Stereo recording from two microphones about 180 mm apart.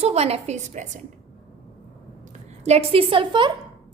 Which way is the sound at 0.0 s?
35° right (ahead or behind).